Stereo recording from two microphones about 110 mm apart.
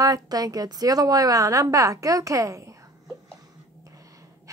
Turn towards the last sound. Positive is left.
turn(degrees=-30)  # may be behind; listen again after turning